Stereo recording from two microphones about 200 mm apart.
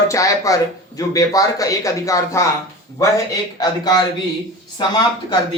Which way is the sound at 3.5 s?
20° left (ahead or behind).